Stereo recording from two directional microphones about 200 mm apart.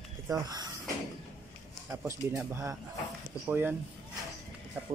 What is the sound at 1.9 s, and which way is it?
Speech, 10° right (ahead or behind).